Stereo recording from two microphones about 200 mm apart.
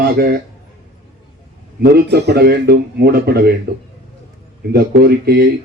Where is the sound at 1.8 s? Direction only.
55° right (ahead or behind).